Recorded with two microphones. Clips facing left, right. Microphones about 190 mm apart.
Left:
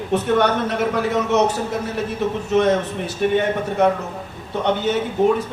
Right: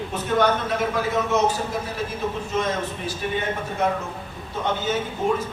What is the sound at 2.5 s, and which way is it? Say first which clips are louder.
A man's voice: left 11 dB; 70° left (ahead or behind).